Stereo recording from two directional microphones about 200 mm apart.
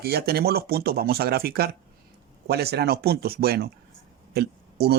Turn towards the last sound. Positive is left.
turn(degrees=-55)  # may be behind; listen again after turning